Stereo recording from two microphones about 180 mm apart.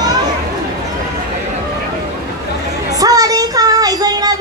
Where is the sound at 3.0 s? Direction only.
20° right (ahead or behind).